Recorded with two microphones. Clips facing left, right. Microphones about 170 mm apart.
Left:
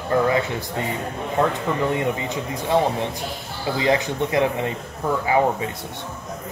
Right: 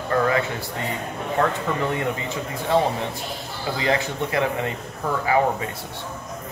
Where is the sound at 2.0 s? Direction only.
15° left (ahead or behind).